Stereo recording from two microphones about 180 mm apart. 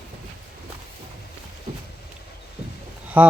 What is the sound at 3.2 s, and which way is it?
Speech, 10° right (ahead or behind).